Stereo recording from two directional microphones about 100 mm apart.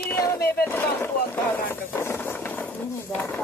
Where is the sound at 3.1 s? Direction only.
25° left (ahead or behind).